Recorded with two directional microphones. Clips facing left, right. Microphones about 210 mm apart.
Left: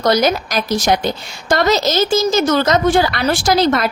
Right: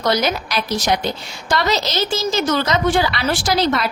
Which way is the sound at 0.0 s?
45° left (ahead or behind).